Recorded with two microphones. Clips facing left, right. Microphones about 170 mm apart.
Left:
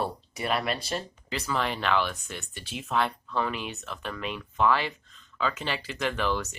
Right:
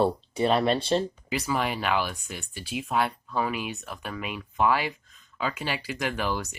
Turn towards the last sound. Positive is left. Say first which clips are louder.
# left 1 dB
turn(degrees=-10)  # may be behind; listen again after turning